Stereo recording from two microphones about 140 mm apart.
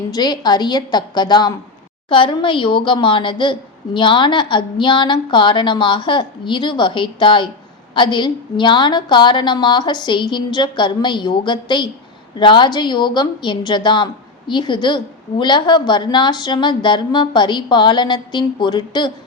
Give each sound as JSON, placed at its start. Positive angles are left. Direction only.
{"t": 0.1, "sound": "a woman's voice", "side_deg": 30}